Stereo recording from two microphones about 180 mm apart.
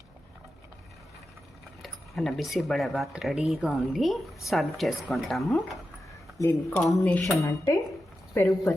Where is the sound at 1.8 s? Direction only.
Centre (ahead or behind).